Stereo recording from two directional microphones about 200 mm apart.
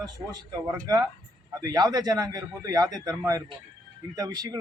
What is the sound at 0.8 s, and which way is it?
A man's voice, 20° right (ahead or behind).